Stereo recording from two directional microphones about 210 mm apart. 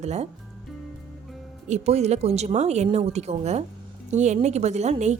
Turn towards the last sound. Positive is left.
turn(degrees=-35)  # may be behind; listen again after turning